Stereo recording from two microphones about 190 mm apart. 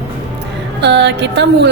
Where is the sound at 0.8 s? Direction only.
65° right (ahead or behind).